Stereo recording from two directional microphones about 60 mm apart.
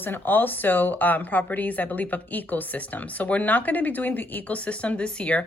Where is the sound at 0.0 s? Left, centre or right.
Left.